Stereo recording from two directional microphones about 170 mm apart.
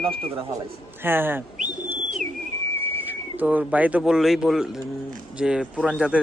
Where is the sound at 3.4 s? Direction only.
10° right (ahead or behind).